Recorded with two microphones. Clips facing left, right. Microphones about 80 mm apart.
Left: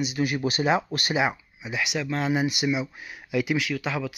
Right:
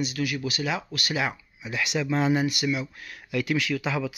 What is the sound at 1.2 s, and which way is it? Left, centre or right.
Speech, centre.